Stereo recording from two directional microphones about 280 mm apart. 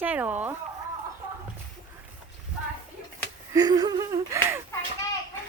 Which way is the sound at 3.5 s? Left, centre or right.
Centre.